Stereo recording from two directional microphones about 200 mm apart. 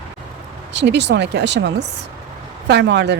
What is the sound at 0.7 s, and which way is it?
Speech, 60° right (ahead or behind).